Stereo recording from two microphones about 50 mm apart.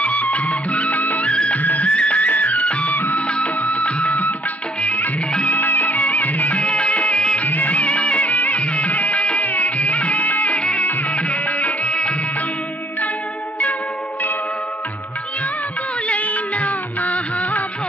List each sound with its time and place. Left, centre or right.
0.0 s music: left
1.3 s music: left
5.4 s music: left
7.4 s music: left
9.4 s music: left
9.8 s music: left
10.6 s music: left
11.2 s music: left
11.9 s music: left
16.1 s music: left